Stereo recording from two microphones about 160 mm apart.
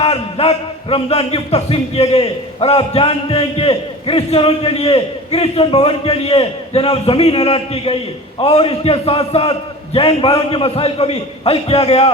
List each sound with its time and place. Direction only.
0.0 s a man's voice: 40° left (ahead or behind)